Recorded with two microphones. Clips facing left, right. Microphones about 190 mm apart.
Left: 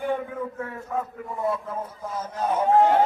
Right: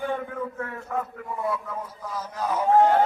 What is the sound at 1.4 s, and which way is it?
A man's voice, 25° left (ahead or behind).